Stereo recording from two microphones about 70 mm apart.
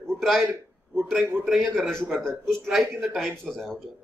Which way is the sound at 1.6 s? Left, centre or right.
Centre.